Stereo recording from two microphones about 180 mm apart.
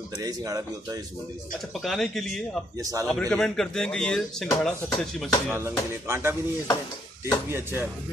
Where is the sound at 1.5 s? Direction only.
Centre (ahead or behind).